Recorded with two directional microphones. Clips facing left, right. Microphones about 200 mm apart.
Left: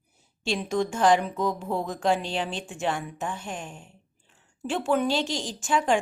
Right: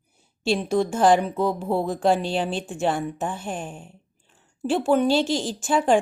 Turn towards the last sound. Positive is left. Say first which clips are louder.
# right 4 dB
turn(degrees=-35)  # may be behind; listen again after turning